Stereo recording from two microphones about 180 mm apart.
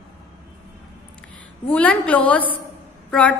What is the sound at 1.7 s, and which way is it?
Speech, 10° left (ahead or behind).